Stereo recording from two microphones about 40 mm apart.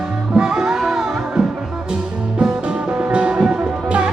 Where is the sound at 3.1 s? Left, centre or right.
Right.